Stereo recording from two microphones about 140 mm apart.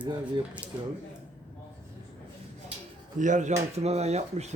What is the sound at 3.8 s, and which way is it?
Speech, 50° right (ahead or behind).